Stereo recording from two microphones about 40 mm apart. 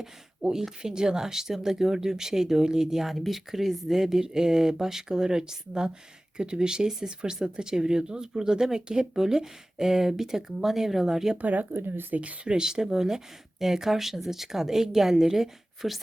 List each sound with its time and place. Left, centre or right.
0.4 s speech: right
11.3 s speech: right
11.7 s speech: right
12.5 s speech: centre